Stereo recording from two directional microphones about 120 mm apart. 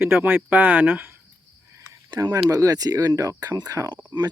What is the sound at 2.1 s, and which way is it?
Speech, 30° right (ahead or behind).